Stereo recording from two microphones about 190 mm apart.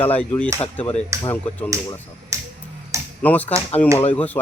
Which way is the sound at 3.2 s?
10° left (ahead or behind).